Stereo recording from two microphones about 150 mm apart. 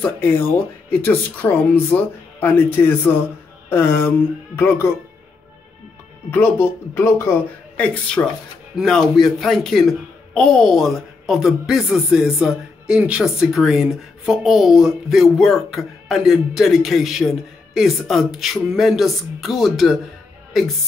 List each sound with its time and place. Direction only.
0.0 s speech: 15° left (ahead or behind)
6.3 s speech: 15° left (ahead or behind)
7.7 s speech: 5° left (ahead or behind)